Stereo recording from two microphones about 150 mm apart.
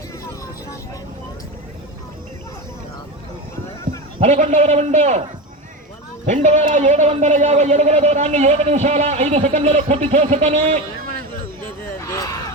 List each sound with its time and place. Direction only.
4.2 s a man's voice: 45° right (ahead or behind)
6.2 s a man's voice: 50° right (ahead or behind)
11.9 s a sound: 20° left (ahead or behind)